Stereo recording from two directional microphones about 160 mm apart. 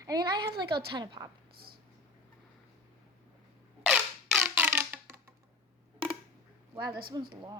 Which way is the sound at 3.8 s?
5° right (ahead or behind).